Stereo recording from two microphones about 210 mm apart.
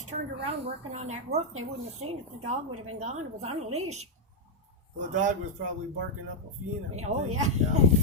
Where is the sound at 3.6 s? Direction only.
90° right.